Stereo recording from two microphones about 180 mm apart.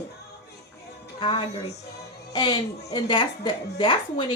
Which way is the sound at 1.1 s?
30° left (ahead or behind).